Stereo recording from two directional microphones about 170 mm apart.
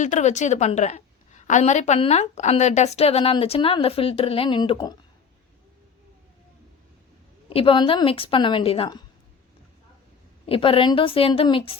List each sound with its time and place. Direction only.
0.0 s a woman's voice: 45° left (ahead or behind); by 4.8 s 30° left (ahead or behind)
7.5 s a woman's voice: 30° left (ahead or behind)
10.4 s a woman's voice: 30° left (ahead or behind)